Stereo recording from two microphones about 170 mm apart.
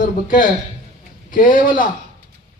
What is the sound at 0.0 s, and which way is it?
A man's voice, 55° left (ahead or behind).